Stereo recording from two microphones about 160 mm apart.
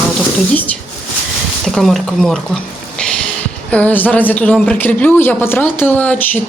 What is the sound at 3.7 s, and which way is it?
Speech, 10° left (ahead or behind).